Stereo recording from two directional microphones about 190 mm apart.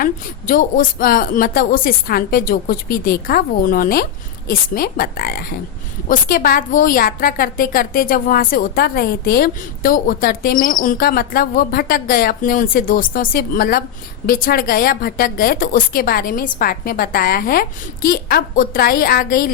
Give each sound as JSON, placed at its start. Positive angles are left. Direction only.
{"t": 0.0, "sound": "a woman's voice", "side_deg": 45}